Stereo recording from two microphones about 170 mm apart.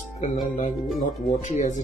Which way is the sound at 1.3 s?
50° left (ahead or behind).